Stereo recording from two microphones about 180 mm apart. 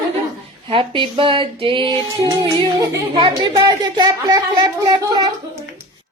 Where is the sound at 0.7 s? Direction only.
30° right (ahead or behind).